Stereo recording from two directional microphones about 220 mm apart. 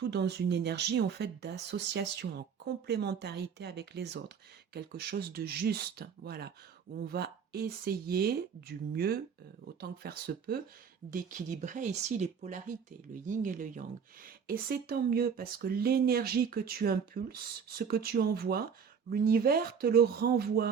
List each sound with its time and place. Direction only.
0.0 s speech: 50° right (ahead or behind)